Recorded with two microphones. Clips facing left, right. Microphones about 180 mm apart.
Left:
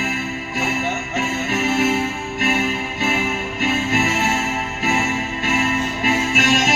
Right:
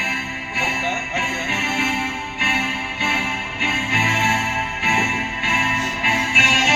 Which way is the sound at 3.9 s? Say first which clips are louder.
Left 4 dB; 40° left (ahead or behind).